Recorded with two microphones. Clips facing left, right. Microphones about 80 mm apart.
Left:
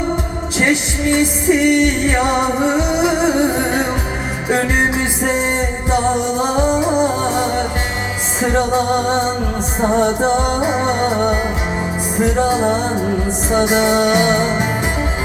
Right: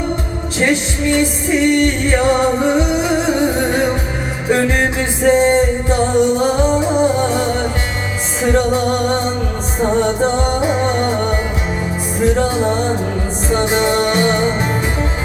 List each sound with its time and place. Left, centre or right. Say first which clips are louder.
1.2 s music: left 3 dB; centre